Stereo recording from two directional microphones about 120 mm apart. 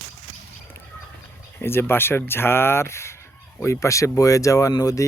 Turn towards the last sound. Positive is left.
turn(degrees=30)  # may be behind; listen again after turning